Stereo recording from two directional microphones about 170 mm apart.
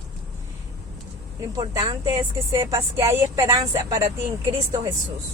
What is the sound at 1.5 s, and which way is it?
Speech, 20° right (ahead or behind).